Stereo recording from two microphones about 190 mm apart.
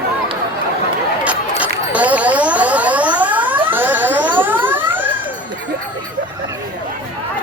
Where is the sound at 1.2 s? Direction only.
10° right (ahead or behind).